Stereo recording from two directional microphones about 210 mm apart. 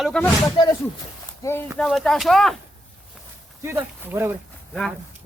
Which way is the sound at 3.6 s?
10° right (ahead or behind).